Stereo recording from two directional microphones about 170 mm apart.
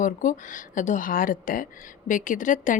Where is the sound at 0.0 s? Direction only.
50° left (ahead or behind).